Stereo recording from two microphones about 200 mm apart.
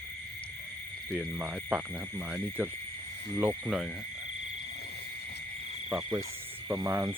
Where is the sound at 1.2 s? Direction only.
10° right (ahead or behind).